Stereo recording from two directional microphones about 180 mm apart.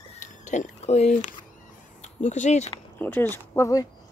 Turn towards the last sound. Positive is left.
turn(degrees=15)  # may be behind; listen again after turning